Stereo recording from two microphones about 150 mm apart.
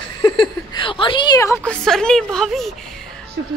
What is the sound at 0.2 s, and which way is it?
Speech, 30° left (ahead or behind).